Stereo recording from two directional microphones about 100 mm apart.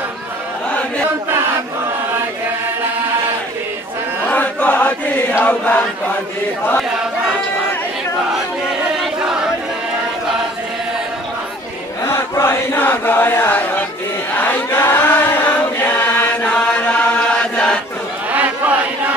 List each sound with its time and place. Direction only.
4.3 s chant: 15° left (ahead or behind)
9.0 s choir: 5° right (ahead or behind)
12.0 s chant: 25° left (ahead or behind); by 17.7 s 10° left (ahead or behind)
18.3 s a sound: 15° right (ahead or behind)